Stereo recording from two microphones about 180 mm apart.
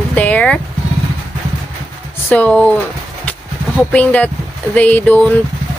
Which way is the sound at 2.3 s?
10° left (ahead or behind).